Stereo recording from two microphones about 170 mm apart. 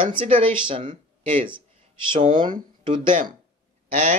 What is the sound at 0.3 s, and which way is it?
Speech, 35° right (ahead or behind).